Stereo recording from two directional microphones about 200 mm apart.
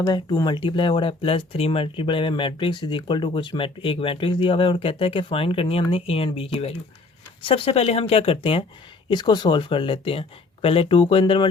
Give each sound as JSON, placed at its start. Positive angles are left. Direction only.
{"t": 0.0, "sound": "speech", "side_deg": 20}